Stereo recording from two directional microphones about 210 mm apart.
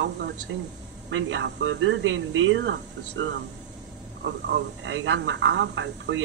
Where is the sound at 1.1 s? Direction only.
60° right (ahead or behind).